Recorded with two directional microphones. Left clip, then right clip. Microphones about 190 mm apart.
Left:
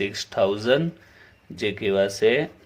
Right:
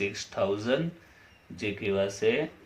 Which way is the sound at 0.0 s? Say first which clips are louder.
Left 7 dB; 50° left (ahead or behind).